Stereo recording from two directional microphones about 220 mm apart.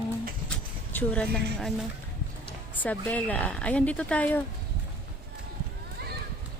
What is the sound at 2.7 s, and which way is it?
Speech, 5° left (ahead or behind).